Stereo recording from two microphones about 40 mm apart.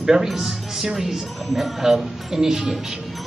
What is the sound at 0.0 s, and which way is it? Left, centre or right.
Speech, centre.